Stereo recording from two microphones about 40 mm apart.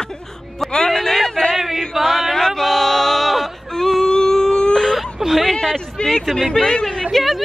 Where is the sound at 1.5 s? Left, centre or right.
Centre.